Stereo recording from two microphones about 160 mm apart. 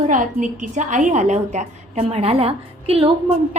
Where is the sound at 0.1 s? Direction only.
55° right (ahead or behind).